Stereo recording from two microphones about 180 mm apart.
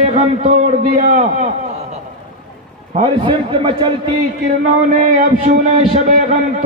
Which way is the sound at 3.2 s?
25° right (ahead or behind).